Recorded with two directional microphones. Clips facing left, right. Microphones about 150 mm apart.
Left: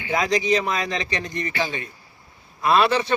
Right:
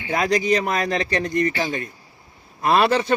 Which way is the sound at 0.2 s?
50° right (ahead or behind).